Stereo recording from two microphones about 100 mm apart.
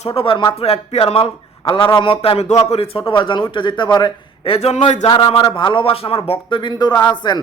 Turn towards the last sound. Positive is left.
turn(degrees=45)  # may be behind; listen again after turning